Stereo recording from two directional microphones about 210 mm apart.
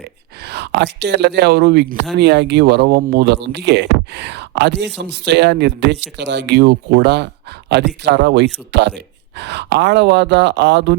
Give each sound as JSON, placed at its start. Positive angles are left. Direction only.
{"t": 0.4, "sound": "speech", "side_deg": -55}